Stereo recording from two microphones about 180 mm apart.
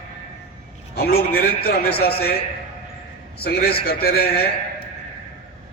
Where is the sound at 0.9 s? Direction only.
60° left (ahead or behind).